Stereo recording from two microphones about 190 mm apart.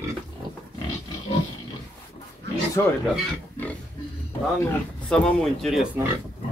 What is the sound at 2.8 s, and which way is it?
Speech, 15° left (ahead or behind).